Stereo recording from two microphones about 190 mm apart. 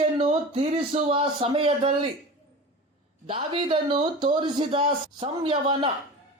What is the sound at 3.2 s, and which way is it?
Speech, 25° right (ahead or behind).